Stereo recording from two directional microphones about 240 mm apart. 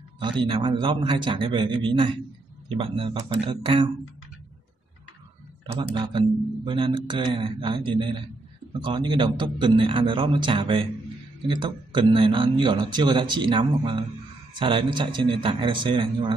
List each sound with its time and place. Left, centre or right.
0.2 s speech: centre
5.8 s speech: centre